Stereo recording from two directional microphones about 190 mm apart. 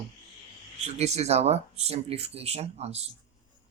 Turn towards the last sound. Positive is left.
turn(degrees=-35)  # may be behind; listen again after turning